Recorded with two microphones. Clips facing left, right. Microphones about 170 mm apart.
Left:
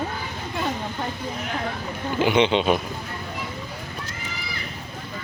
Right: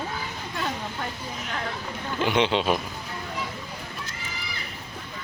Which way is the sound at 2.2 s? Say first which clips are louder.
Left 4 dB; centre (ahead or behind).